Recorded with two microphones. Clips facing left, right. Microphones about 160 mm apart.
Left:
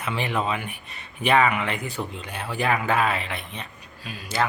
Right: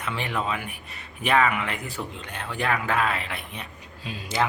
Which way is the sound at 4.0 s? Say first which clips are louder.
Even; 25° right (ahead or behind).